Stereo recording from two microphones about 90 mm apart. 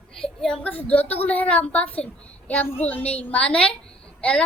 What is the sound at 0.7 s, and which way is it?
A child's voice, 20° left (ahead or behind).